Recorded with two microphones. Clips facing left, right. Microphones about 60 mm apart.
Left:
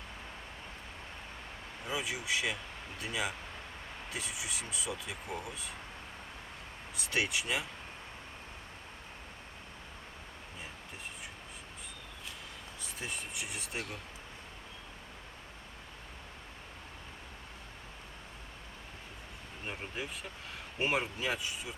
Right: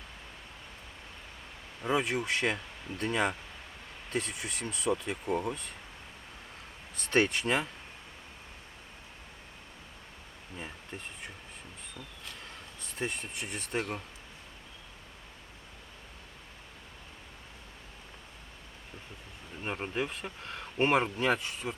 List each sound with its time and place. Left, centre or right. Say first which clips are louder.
1.8 s speech: right 8 dB; right
7.1 s speech: right 6 dB; right
13.0 s speech: right 5 dB; right
19.6 s speech: right 7 dB; right